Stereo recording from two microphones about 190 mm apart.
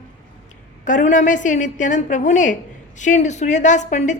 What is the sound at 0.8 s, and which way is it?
A woman's voice, 40° left (ahead or behind).